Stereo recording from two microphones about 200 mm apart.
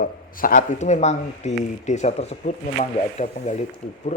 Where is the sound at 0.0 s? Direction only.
45° left (ahead or behind).